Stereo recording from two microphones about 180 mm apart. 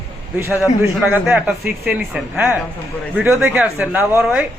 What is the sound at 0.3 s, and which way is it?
A man's voice, 10° right (ahead or behind).